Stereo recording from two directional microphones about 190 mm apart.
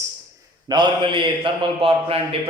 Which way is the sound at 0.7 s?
25° right (ahead or behind).